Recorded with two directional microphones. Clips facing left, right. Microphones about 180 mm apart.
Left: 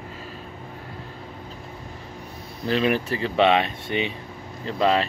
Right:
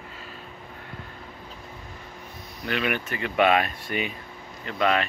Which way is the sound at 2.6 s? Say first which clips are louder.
Left 6 dB; 30° left (ahead or behind).